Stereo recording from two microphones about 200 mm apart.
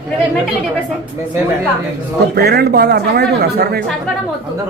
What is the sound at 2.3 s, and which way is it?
Speech, 55° right (ahead or behind).